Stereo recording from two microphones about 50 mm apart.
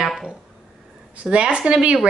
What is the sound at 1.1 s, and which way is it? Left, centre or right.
Speech, right.